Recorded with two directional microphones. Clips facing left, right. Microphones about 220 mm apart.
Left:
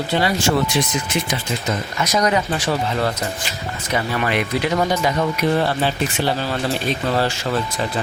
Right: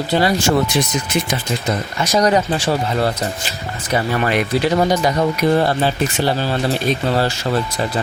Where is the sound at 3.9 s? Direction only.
40° right (ahead or behind).